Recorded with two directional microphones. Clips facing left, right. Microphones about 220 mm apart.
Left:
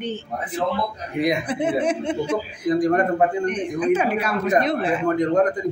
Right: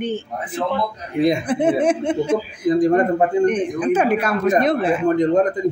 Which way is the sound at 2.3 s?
20° right (ahead or behind).